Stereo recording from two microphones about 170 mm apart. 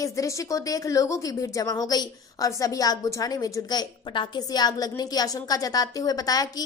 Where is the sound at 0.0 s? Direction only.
20° left (ahead or behind).